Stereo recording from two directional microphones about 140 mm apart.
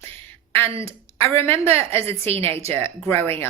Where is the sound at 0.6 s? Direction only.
45° right (ahead or behind).